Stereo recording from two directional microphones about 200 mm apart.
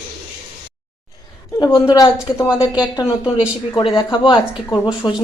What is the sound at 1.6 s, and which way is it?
A woman's voice, 15° left (ahead or behind).